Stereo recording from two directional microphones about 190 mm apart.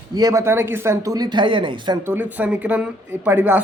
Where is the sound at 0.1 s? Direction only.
20° right (ahead or behind).